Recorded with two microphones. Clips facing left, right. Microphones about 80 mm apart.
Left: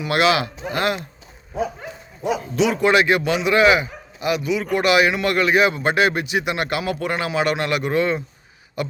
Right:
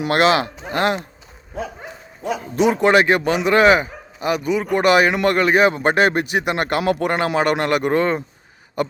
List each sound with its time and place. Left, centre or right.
0.0 s speech: right
2.2 s a man's voice: centre
2.6 s speech: right